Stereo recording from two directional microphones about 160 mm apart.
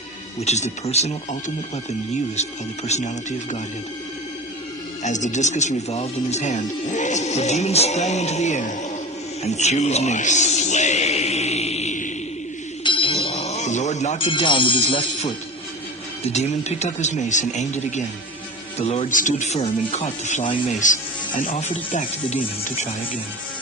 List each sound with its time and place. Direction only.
0.3 s speech: 45° left (ahead or behind)
5.0 s speech: 50° left (ahead or behind)
12.8 s music: 30° left (ahead or behind)
16.2 s speech: 45° left (ahead or behind)